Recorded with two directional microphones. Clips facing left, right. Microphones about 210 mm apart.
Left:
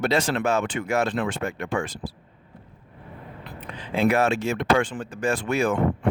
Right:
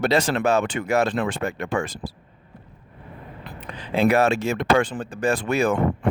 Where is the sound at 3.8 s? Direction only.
35° right (ahead or behind).